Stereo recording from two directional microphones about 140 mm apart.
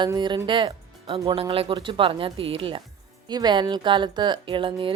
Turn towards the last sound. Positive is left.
turn(degrees=-35)  # may be behind; listen again after turning